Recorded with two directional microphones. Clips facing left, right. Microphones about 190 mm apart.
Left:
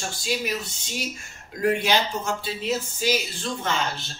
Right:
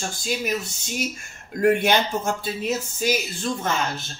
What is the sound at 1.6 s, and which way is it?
Speech, 50° right (ahead or behind).